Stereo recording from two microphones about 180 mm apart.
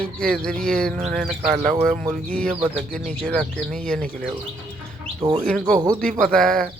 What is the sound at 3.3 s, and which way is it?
Speech, 5° left (ahead or behind).